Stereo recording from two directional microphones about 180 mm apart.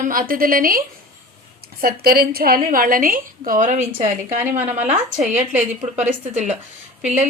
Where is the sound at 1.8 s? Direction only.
55° right (ahead or behind).